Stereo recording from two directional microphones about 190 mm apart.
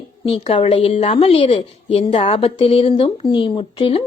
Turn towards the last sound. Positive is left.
turn(degrees=25)  # may be behind; listen again after turning